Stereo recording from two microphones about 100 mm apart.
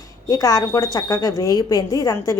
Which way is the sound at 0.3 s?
35° left (ahead or behind).